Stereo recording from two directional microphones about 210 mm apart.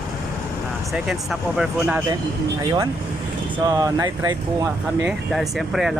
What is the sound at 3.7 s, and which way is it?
Speech, 15° right (ahead or behind).